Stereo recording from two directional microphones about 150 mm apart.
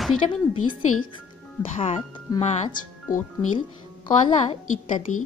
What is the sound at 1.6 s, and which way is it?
Speech, 40° left (ahead or behind).